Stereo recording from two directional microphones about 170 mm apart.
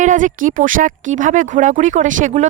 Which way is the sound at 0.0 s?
50° right (ahead or behind).